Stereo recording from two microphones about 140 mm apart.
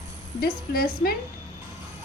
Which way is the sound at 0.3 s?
90° left.